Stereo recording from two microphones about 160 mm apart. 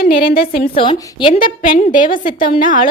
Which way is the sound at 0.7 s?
35° left (ahead or behind).